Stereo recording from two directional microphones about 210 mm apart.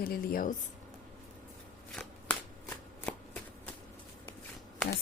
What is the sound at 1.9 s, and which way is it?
Shuffling cards, 5° left (ahead or behind).